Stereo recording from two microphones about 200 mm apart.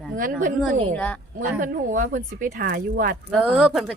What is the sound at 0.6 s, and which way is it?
Speech, 5° left (ahead or behind).